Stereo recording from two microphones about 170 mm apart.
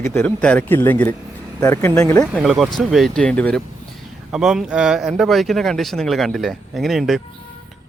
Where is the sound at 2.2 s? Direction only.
5° right (ahead or behind).